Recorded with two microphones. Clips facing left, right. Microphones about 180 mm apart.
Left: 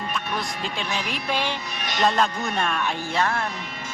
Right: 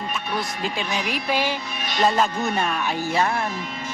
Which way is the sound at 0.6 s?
5° right (ahead or behind).